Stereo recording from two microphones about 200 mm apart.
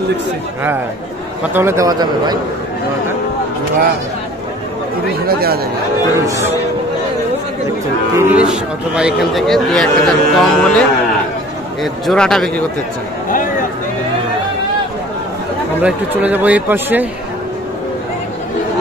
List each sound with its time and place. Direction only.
1.5 s speech: 10° right (ahead or behind)
5.2 s speech: 50° right (ahead or behind)
6.2 s speech: 15° right (ahead or behind)
8.2 s a man's voice: 5° right (ahead or behind)
15.8 s speech: 10° right (ahead or behind)